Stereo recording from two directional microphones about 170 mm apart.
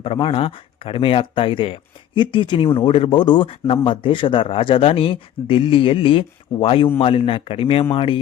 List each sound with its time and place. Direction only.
0.0 s speech: 30° left (ahead or behind)